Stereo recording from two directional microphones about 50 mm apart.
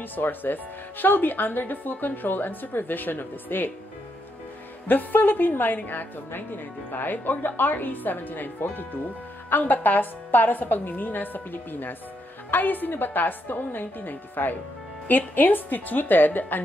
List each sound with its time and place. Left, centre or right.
0.0 s a woman's voice: left
4.8 s a woman's voice: left